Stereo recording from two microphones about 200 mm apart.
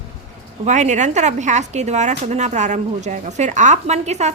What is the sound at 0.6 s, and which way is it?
Speech, 35° right (ahead or behind).